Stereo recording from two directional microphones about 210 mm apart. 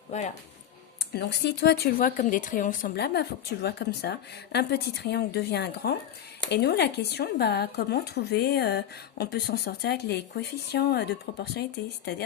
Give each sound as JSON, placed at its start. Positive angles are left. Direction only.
{"t": 1.1, "sound": "speech", "side_deg": 50}